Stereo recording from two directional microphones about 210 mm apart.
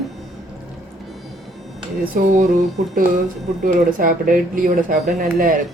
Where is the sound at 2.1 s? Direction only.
35° right (ahead or behind).